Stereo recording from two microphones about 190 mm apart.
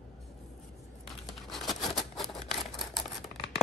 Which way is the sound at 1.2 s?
Centre (ahead or behind).